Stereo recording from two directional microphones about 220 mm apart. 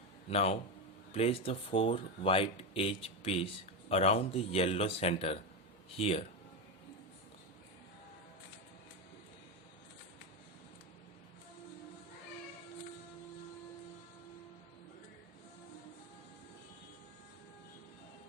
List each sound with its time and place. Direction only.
0.3 s speech: 30° left (ahead or behind)